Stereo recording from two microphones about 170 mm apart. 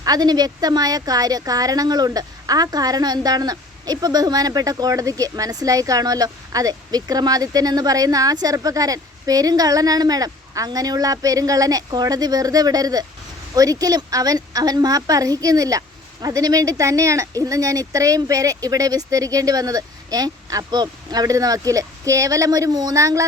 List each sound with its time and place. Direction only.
0.0 s speech: 20° right (ahead or behind)